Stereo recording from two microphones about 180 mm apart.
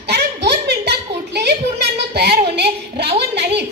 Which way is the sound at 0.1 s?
65° right (ahead or behind).